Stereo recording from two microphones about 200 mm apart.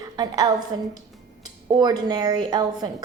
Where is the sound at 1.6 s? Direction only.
20° right (ahead or behind).